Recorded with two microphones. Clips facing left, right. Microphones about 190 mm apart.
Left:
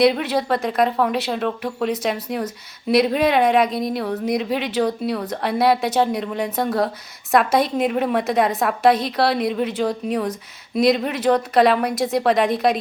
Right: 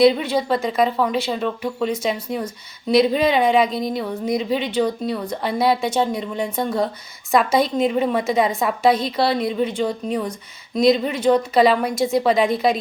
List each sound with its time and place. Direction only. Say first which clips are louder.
0.0 s speech: right 2 dB; centre (ahead or behind)